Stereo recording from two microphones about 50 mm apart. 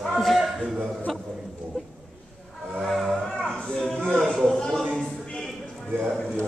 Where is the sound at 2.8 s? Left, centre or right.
Centre.